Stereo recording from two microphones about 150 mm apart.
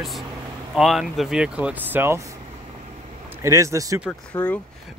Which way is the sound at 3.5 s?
20° right (ahead or behind).